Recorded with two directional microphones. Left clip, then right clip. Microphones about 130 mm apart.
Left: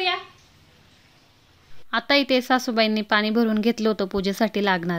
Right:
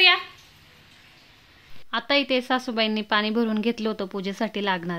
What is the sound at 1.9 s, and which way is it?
A woman's voice, 30° left (ahead or behind).